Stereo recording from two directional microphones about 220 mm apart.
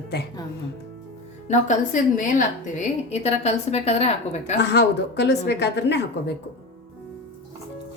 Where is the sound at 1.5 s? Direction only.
35° left (ahead or behind).